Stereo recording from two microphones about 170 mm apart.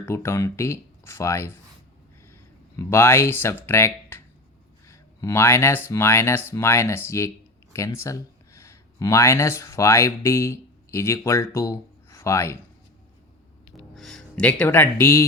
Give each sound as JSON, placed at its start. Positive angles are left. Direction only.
{"t": 0.0, "sound": "speech", "side_deg": 15}
{"t": 13.9, "sound": "speech", "side_deg": 0}